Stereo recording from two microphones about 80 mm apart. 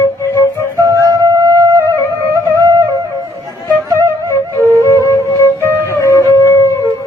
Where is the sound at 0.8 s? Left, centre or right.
Right.